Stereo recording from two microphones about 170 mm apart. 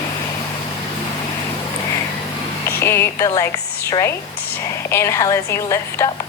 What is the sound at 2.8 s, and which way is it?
A woman's voice, 15° left (ahead or behind).